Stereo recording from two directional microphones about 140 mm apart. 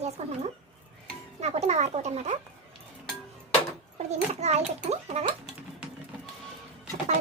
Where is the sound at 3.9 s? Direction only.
50° right (ahead or behind).